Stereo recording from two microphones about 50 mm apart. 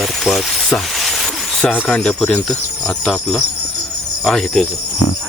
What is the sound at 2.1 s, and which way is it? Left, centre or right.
Speech, centre.